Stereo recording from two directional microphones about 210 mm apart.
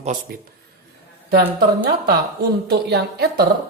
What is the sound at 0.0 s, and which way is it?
Speech, 35° right (ahead or behind).